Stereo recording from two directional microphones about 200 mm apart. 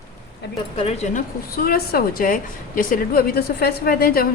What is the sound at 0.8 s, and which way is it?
Speech, 30° left (ahead or behind).